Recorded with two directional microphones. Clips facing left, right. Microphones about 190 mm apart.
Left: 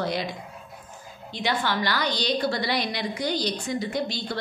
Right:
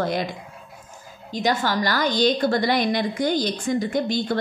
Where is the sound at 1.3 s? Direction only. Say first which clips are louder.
Right 4 dB; 40° right (ahead or behind).